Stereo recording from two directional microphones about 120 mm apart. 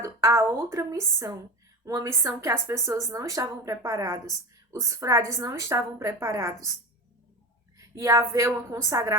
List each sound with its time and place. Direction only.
0.0 s speech: 25° right (ahead or behind)
7.8 s speech: 25° right (ahead or behind)